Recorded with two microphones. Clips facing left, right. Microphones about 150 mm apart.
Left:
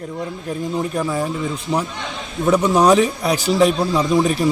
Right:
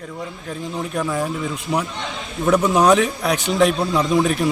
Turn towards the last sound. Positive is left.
turn(degrees=0)  # may be behind; listen again after turning